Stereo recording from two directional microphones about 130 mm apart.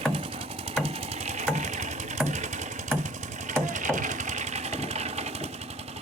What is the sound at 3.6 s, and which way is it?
Sewing machine, 75° right (ahead or behind).